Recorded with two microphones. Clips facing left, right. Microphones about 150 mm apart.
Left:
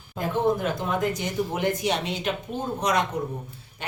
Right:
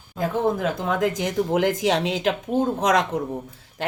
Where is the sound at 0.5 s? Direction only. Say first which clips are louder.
Right 2 dB; 90° right.